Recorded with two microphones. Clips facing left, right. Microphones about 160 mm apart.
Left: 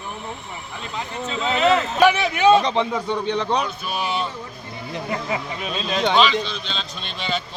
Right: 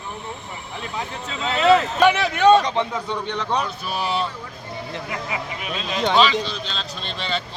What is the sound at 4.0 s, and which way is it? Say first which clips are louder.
Speech: right 1 dB; 35° right (ahead or behind).